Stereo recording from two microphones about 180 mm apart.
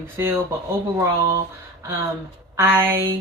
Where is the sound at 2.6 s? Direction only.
15° right (ahead or behind).